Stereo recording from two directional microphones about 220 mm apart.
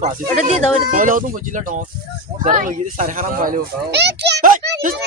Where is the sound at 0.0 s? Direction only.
30° right (ahead or behind).